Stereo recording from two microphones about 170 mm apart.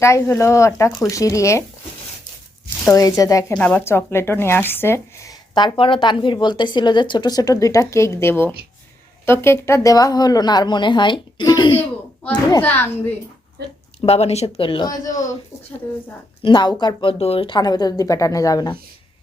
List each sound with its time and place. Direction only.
0.0 s speech: 15° left (ahead or behind)
2.8 s speech: 20° left (ahead or behind)
3.5 s speech: 10° left (ahead or behind)
14.0 s speech: 35° left (ahead or behind); by 15.2 s 20° left (ahead or behind)
16.4 s speech: 30° left (ahead or behind)